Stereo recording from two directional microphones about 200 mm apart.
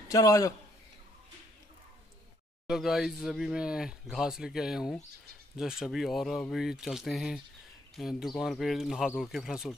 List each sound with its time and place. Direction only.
0.1 s a man's voice: 15° left (ahead or behind)
2.6 s speech: 5° right (ahead or behind)